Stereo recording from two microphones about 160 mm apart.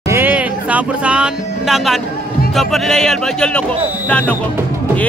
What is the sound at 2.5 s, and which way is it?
Speech, centre (ahead or behind).